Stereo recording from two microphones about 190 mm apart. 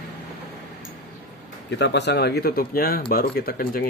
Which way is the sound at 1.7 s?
65° left (ahead or behind).